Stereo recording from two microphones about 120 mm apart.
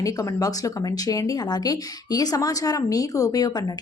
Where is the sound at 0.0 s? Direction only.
30° left (ahead or behind).